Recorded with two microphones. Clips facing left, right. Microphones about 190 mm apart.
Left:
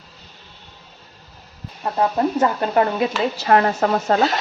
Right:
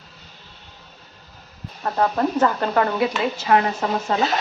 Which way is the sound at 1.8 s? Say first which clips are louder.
Left 1 dB; 15° left (ahead or behind).